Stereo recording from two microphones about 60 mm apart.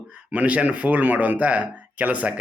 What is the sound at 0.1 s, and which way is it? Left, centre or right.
A man's voice, right.